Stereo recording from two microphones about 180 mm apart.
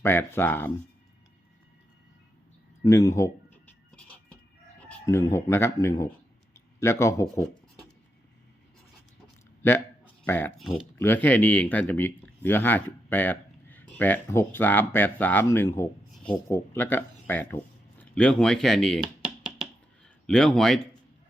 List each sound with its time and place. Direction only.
0.0 s speech: 15° left (ahead or behind)
2.8 s speech: 15° left (ahead or behind)
3.9 s music: 5° left (ahead or behind)
5.0 s speech: 15° left (ahead or behind)
10.2 s speech: 10° left (ahead or behind)
10.6 s a man's voice: centre (ahead or behind)
10.9 s speech: 10° left (ahead or behind)
18.0 s a sound: 5° left (ahead or behind)
20.2 s a man's voice: 5° left (ahead or behind)